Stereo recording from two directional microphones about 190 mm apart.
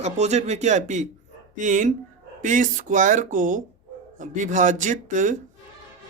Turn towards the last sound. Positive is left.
turn(degrees=-40)  # may be behind; listen again after turning